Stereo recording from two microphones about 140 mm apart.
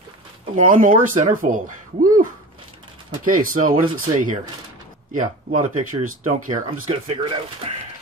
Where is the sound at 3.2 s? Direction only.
75° right (ahead or behind).